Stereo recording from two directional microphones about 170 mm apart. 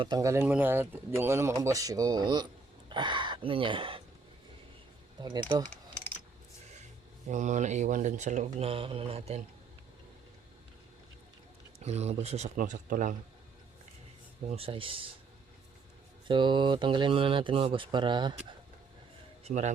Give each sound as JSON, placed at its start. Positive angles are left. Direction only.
{"t": 0.0, "sound": "speech", "side_deg": -20}
{"t": 5.2, "sound": "speech", "side_deg": -25}
{"t": 7.3, "sound": "speech", "side_deg": -45}
{"t": 11.8, "sound": "speech", "side_deg": -40}
{"t": 12.5, "sound": "speech", "side_deg": -50}
{"t": 14.5, "sound": "speech", "side_deg": -35}
{"t": 16.2, "sound": "speech", "side_deg": -30}
{"t": 19.5, "sound": "speech", "side_deg": -40}